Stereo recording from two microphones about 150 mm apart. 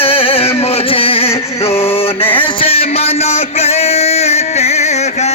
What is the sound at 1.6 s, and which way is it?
Mantra, 40° left (ahead or behind).